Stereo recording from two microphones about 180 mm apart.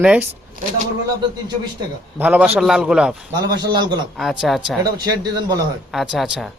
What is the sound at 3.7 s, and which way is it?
Speech, 25° right (ahead or behind).